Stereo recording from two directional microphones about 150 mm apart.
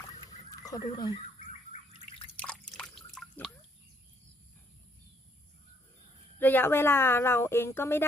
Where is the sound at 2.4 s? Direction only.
5° left (ahead or behind).